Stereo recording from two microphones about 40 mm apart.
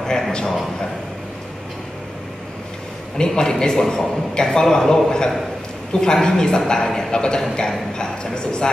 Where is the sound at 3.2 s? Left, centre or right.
Centre.